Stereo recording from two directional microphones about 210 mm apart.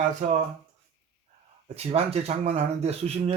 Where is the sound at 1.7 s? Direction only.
30° right (ahead or behind).